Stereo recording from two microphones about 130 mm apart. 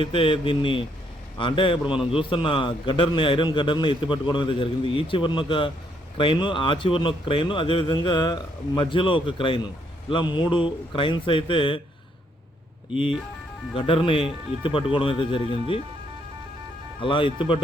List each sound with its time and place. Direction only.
0.0 s a man's voice: 40° left (ahead or behind)
13.7 s speech: 45° left (ahead or behind)
17.0 s a man's voice: 40° left (ahead or behind)